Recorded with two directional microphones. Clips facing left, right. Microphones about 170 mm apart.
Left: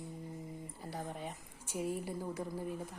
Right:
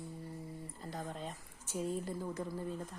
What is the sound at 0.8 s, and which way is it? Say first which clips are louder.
A woman's voice: even; 10° left (ahead or behind).